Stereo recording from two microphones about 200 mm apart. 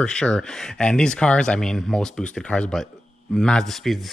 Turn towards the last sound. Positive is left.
turn(degrees=0)  # may be behind; listen again after turning